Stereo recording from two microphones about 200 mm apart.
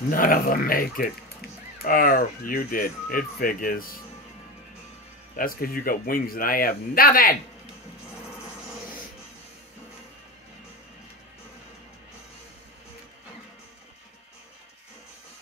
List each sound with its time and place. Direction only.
0.1 s speech: 45° left (ahead or behind)
5.3 s speech: 45° left (ahead or behind)